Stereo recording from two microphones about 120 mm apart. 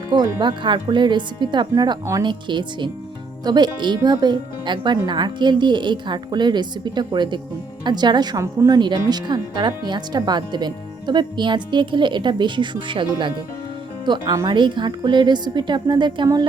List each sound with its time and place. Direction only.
0.1 s speech: 35° right (ahead or behind)